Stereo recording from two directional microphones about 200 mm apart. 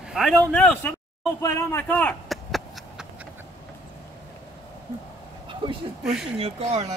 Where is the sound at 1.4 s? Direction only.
15° left (ahead or behind); by 3.0 s centre (ahead or behind).